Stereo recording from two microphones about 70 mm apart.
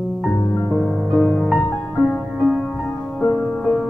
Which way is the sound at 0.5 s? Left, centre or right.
Centre.